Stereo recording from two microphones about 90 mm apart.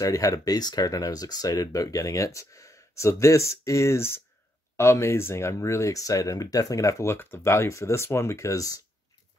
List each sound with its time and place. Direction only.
0.0 s speech: 40° left (ahead or behind)